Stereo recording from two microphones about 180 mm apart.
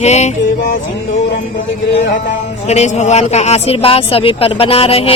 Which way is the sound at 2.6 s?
40° left (ahead or behind).